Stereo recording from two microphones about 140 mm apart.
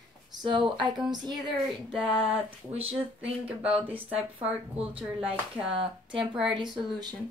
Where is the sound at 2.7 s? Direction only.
45° right (ahead or behind).